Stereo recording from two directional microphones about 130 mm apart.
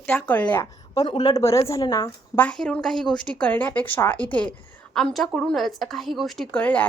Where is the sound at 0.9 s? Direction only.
30° left (ahead or behind).